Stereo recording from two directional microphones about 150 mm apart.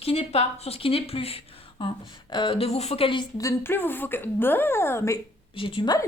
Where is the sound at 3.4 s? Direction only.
15° left (ahead or behind).